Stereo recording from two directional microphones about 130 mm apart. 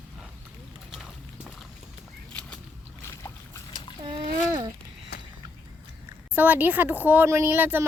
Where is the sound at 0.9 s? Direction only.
5° right (ahead or behind).